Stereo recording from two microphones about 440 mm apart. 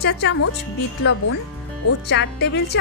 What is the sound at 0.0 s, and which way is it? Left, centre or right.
Speech, left.